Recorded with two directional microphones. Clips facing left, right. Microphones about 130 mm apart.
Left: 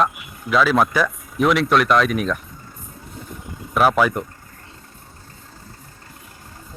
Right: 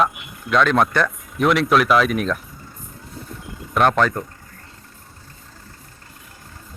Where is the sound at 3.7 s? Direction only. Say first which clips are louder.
Left 1 dB; 5° left (ahead or behind).